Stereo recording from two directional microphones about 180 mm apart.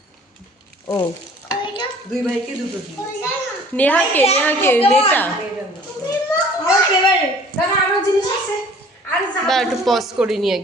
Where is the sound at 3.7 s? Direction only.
10° left (ahead or behind).